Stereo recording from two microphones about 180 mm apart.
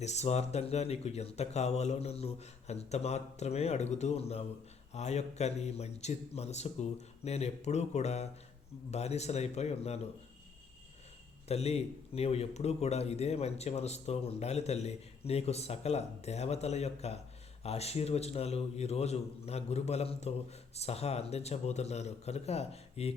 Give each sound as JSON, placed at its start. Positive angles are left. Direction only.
{"t": 0.0, "sound": "speech", "side_deg": 40}
{"t": 11.4, "sound": "speech", "side_deg": 35}